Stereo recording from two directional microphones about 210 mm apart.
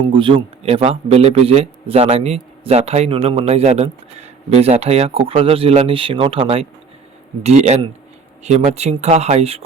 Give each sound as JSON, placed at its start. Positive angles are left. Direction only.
{"t": 0.0, "sound": "a man's voice", "side_deg": -25}